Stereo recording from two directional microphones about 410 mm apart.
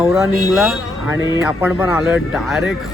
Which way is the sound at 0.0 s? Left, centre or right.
Centre.